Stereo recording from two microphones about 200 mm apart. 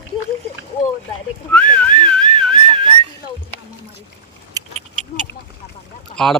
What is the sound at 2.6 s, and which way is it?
Whistling, 25° right (ahead or behind).